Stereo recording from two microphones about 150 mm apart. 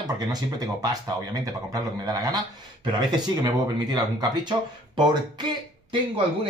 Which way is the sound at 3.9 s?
30° right (ahead or behind).